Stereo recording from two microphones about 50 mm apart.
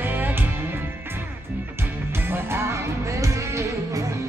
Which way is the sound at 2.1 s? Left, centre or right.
Right.